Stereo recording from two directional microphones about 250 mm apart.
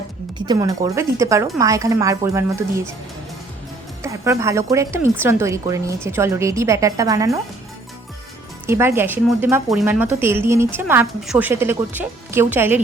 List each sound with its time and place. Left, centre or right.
0.3 s speech: centre
4.0 s speech: centre
8.6 s speech: centre